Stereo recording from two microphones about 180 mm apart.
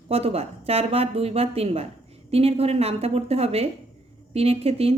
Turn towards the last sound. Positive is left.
turn(degrees=-35)  # may be behind; listen again after turning